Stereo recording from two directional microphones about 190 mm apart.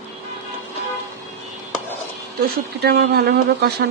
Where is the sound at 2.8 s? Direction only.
55° right (ahead or behind).